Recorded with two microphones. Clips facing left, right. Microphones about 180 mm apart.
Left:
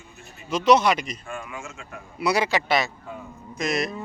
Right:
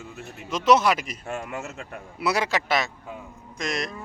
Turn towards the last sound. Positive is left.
turn(degrees=5)  # may be behind; listen again after turning